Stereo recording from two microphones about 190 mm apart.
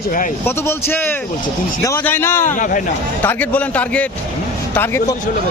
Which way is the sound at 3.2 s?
10° left (ahead or behind).